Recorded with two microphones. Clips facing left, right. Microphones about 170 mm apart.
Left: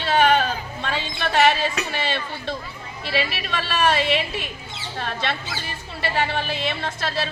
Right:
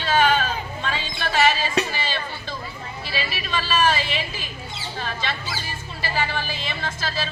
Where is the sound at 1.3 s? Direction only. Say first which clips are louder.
Left 1 dB; 65° left (ahead or behind).